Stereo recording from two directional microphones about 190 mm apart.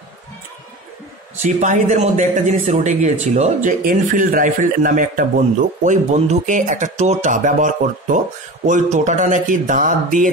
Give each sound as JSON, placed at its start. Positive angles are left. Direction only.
{"t": 1.4, "sound": "speech", "side_deg": -40}